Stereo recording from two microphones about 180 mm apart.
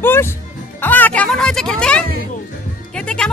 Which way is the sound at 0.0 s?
10° left (ahead or behind).